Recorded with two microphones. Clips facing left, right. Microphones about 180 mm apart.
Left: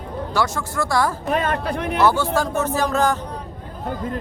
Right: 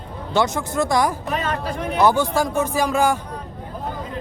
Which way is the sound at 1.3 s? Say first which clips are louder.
Left 3 dB; 50° left (ahead or behind).